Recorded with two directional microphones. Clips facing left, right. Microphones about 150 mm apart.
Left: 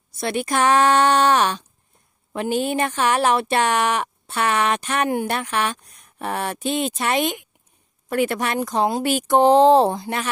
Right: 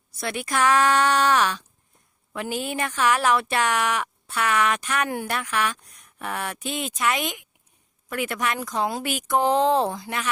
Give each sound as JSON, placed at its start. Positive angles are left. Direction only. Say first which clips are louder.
{"t": 0.2, "sound": "speech", "louder": "left 4 dB", "side_deg": 25}